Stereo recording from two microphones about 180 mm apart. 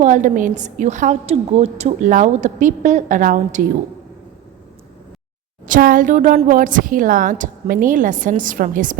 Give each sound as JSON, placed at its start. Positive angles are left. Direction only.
{"t": 0.0, "sound": "a woman's voice", "side_deg": -45}
{"t": 5.6, "sound": "a woman's voice", "side_deg": -50}